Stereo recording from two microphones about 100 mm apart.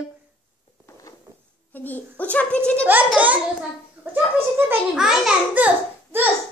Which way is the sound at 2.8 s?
15° right (ahead or behind).